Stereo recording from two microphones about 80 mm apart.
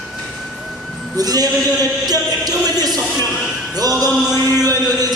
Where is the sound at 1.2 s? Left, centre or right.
Right.